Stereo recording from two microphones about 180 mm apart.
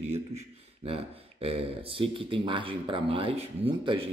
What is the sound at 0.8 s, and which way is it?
Speech, 30° right (ahead or behind).